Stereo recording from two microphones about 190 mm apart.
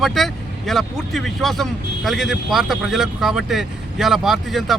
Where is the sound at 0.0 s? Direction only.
Centre (ahead or behind).